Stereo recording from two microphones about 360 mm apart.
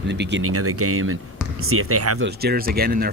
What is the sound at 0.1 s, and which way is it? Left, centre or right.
Speech, right.